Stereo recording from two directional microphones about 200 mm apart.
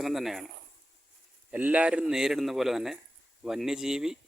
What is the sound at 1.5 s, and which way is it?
Speech, 5° right (ahead or behind).